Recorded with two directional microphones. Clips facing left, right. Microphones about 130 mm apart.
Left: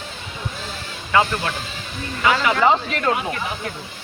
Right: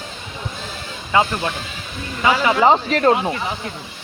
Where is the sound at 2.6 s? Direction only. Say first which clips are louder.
Right 6 dB; 35° right (ahead or behind).